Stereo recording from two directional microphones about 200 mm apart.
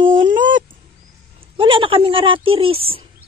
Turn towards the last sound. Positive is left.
turn(degrees=-30)  # may be behind; listen again after turning